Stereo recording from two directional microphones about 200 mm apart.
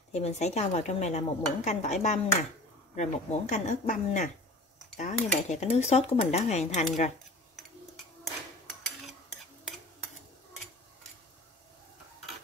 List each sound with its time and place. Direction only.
0.1 s speech: 35° left (ahead or behind)